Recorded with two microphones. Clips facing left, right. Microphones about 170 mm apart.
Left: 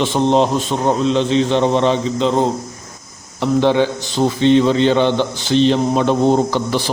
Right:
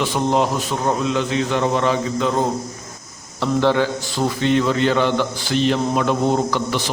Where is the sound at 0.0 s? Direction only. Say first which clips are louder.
Left 4 dB; 25° left (ahead or behind).